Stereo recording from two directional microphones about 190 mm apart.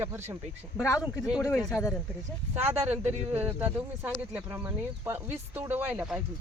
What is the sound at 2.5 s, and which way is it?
Speech, 10° right (ahead or behind).